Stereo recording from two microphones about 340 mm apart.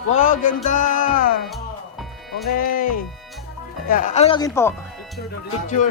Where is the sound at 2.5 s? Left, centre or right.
Left.